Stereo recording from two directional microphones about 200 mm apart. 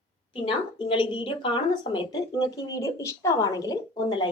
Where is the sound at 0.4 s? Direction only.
25° left (ahead or behind).